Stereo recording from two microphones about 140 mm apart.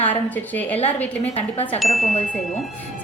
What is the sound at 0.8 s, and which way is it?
Speech, 45° left (ahead or behind).